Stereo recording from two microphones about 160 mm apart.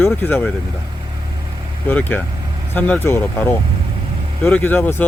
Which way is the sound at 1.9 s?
10° left (ahead or behind).